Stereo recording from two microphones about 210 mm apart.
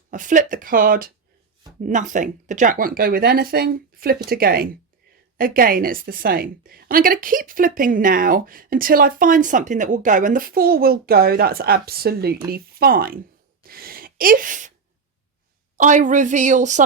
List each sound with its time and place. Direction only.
0.1 s a woman's voice: 35° right (ahead or behind)
13.7 s sneeze: 45° right (ahead or behind)
15.8 s speech: 35° right (ahead or behind)